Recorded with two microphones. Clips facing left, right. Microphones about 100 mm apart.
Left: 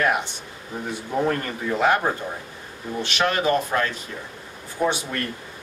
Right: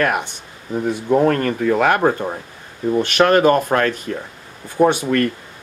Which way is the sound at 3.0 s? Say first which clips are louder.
Right 9 dB; 50° right (ahead or behind).